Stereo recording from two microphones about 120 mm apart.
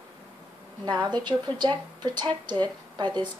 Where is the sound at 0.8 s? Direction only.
35° right (ahead or behind).